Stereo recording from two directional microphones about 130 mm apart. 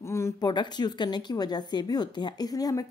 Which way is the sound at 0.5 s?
35° left (ahead or behind).